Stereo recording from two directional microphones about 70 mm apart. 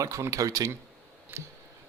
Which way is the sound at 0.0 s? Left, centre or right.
Right.